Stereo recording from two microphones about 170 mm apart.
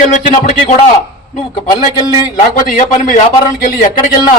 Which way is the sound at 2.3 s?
50° left (ahead or behind).